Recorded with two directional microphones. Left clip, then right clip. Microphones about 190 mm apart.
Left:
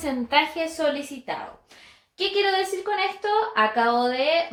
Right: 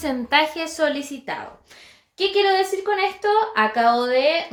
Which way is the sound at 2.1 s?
55° right (ahead or behind).